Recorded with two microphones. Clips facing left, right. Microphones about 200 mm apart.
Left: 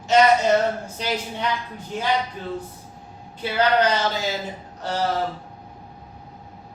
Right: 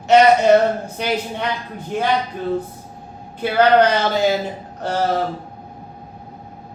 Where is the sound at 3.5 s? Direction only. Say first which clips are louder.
Right 6 dB; 55° right (ahead or behind).